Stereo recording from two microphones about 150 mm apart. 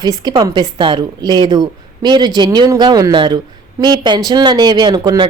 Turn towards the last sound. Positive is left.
turn(degrees=-30)  # may be behind; listen again after turning